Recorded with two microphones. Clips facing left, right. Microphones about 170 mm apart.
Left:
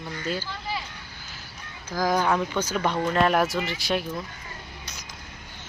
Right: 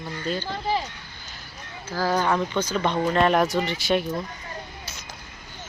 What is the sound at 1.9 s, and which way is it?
Speech, 10° left (ahead or behind).